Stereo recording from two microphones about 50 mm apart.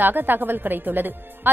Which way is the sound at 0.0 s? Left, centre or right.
Right.